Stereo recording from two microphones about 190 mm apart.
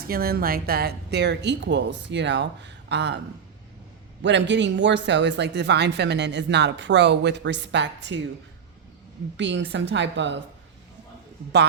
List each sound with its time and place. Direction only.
0.0 s speech: 50° right (ahead or behind)
4.2 s speech: 70° right (ahead or behind)
9.4 s speech: 70° right (ahead or behind)